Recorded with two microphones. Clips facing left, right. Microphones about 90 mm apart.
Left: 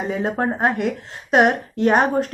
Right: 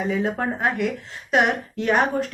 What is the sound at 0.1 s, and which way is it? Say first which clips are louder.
A woman's voice: left 2 dB; 35° left (ahead or behind).